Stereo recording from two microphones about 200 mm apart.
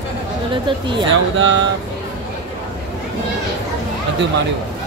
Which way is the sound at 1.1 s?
70° right (ahead or behind).